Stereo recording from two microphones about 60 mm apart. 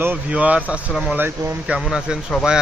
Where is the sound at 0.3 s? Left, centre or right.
Right.